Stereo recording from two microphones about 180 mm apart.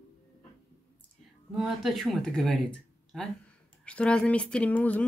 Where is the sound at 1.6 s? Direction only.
Centre (ahead or behind).